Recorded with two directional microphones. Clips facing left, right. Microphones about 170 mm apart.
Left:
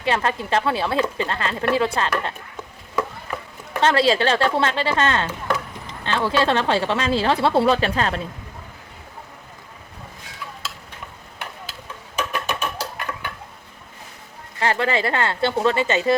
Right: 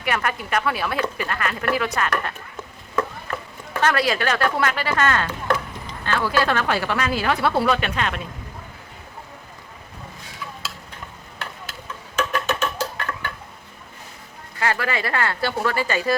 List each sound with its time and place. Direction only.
0.0 s speech: 25° left (ahead or behind)
2.9 s a sound: 10° left (ahead or behind)
3.8 s speech: 25° left (ahead or behind)
12.1 s music: 10° left (ahead or behind)
14.6 s speech: 25° left (ahead or behind)